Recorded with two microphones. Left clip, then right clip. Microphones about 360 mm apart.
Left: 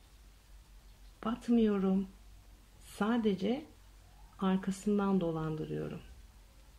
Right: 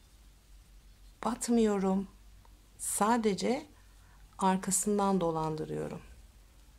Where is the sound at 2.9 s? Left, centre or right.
Centre.